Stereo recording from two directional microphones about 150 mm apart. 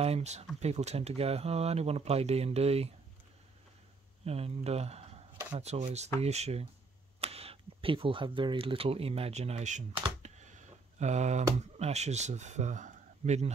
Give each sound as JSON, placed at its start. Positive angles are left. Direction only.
{"t": 0.0, "sound": "speech", "side_deg": -45}
{"t": 4.2, "sound": "speech", "side_deg": -45}
{"t": 10.2, "sound": "a sound", "side_deg": -50}
{"t": 11.5, "sound": "speech", "side_deg": -50}